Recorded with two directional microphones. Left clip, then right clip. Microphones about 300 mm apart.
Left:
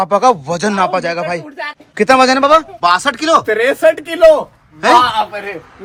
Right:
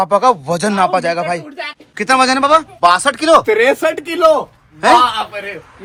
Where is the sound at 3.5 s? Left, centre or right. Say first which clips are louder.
Left 1 dB; centre.